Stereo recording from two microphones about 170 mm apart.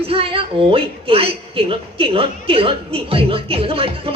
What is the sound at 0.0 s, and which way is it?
A woman's voice, 35° right (ahead or behind).